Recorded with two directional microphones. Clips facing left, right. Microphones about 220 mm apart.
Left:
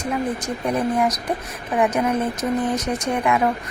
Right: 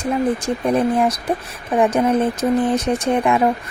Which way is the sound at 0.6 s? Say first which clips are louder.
Right 4 dB; 30° right (ahead or behind).